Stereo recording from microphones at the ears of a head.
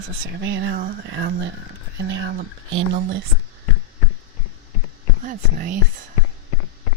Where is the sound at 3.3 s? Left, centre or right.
Left.